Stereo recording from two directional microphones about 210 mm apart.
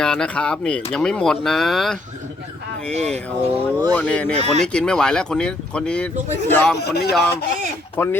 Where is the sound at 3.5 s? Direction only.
15° right (ahead or behind).